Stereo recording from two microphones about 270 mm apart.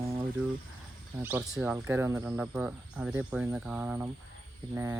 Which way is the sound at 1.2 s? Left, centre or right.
Centre.